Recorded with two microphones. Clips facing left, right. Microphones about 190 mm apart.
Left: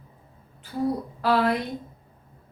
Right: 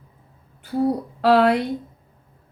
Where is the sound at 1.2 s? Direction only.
75° right (ahead or behind).